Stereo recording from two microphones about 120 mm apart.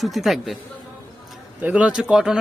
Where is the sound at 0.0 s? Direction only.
Centre (ahead or behind).